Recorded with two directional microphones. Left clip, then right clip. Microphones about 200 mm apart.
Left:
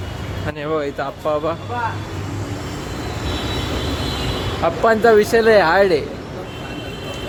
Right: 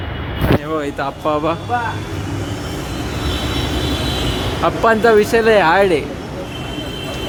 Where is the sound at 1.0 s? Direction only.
5° right (ahead or behind).